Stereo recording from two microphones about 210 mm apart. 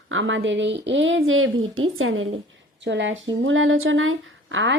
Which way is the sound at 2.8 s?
60° right (ahead or behind).